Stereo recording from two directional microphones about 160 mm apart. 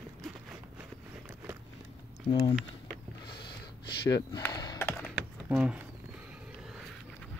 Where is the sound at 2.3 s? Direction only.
25° left (ahead or behind).